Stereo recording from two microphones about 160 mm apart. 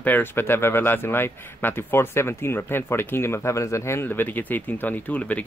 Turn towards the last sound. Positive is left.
turn(degrees=10)  # may be behind; listen again after turning